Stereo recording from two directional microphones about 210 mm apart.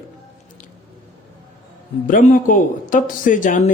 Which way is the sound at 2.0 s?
40° left (ahead or behind).